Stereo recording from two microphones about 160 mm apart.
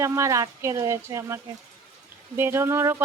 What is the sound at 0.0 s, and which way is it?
Speech, 20° right (ahead or behind).